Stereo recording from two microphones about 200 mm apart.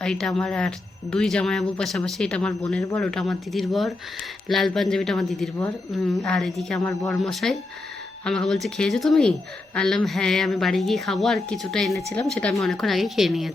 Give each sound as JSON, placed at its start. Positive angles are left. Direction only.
{"t": 0.0, "sound": "a woman's voice", "side_deg": 5}
{"t": 6.7, "sound": "speech", "side_deg": 15}
{"t": 7.2, "sound": "a woman's voice", "side_deg": 0}
{"t": 11.9, "sound": "a woman's voice", "side_deg": 15}